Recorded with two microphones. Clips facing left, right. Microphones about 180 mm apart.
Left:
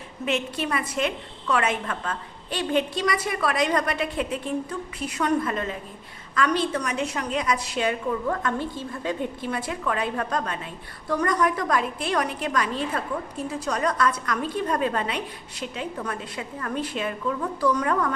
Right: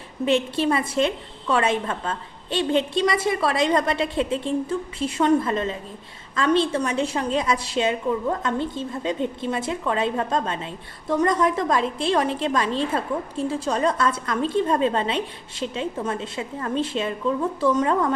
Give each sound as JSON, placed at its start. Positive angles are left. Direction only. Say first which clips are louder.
{"t": 0.3, "sound": "a woman's voice", "louder": "right 6 dB", "side_deg": -30}